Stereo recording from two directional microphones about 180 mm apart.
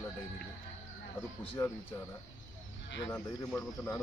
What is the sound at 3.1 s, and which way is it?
Speech, 15° left (ahead or behind).